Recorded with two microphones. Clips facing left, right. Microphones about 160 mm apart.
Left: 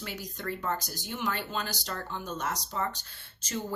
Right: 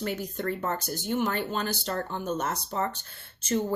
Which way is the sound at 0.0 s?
50° right (ahead or behind).